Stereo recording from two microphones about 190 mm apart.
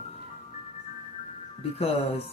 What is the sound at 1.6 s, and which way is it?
Speech, 30° left (ahead or behind).